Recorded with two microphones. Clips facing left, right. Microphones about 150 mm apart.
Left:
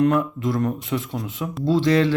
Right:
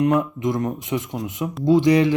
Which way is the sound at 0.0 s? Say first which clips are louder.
Even; 15° right (ahead or behind).